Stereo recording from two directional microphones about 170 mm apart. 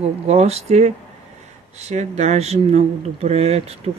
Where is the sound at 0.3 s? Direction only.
40° right (ahead or behind).